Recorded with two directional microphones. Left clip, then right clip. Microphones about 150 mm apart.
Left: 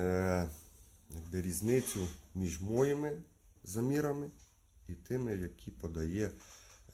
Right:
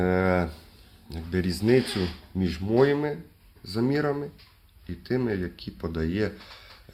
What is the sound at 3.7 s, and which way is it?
Speech, 20° left (ahead or behind).